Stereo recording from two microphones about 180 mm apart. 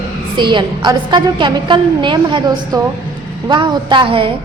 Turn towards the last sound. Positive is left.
turn(degrees=-30)  # may be behind; listen again after turning